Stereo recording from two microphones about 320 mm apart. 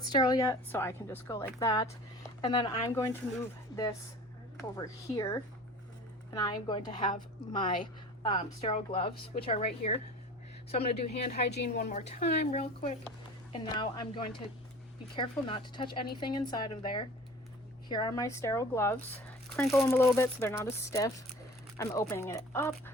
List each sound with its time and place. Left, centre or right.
0.1 s a woman's voice: centre
4.8 s a woman's voice: centre